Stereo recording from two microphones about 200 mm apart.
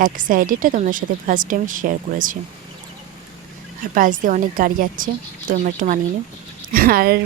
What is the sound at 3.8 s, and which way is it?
Speech, 40° right (ahead or behind).